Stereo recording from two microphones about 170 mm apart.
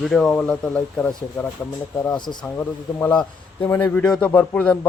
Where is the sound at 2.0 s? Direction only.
20° left (ahead or behind).